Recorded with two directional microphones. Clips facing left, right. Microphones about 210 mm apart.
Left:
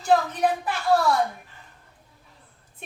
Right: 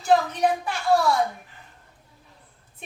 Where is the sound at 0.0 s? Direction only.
Centre (ahead or behind).